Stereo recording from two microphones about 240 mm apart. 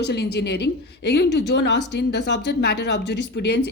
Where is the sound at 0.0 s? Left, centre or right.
Left.